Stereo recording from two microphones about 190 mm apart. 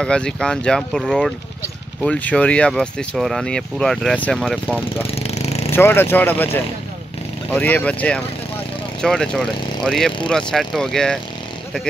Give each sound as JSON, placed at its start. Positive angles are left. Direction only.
{"t": 0.0, "sound": "speech", "side_deg": 5}
{"t": 5.1, "sound": "a sound", "side_deg": 35}
{"t": 5.7, "sound": "speech", "side_deg": 10}